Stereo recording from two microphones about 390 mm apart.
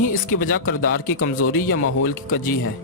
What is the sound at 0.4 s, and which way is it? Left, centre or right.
Speech, left.